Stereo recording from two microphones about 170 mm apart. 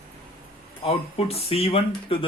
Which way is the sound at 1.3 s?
35° left (ahead or behind).